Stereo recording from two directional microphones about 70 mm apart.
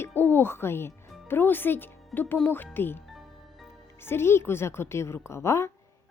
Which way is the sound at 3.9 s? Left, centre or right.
Left.